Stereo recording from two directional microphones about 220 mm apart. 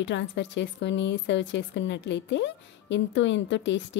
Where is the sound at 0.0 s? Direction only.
55° left (ahead or behind).